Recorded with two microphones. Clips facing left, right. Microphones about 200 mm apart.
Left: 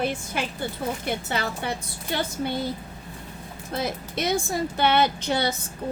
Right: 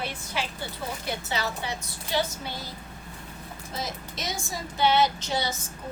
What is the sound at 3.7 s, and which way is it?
Speech, 60° left (ahead or behind).